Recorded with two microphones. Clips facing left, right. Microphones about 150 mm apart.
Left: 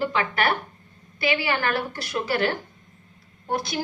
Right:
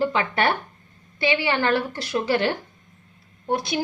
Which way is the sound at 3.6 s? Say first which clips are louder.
Right 2 dB; 25° right (ahead or behind).